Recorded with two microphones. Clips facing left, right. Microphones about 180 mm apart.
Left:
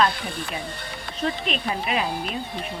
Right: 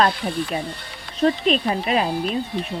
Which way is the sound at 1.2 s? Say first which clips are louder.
Right 8 dB; 40° right (ahead or behind).